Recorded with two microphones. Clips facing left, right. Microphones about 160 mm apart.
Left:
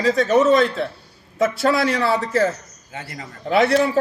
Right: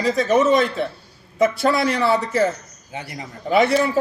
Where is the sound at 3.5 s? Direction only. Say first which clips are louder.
Even; centre (ahead or behind).